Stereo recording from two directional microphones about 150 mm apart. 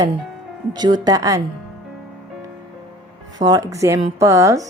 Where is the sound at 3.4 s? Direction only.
25° right (ahead or behind).